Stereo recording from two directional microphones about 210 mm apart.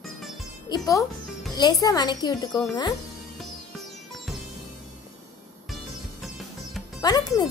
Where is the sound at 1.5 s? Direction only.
20° left (ahead or behind).